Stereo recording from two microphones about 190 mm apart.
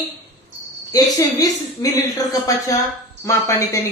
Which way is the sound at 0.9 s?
20° left (ahead or behind).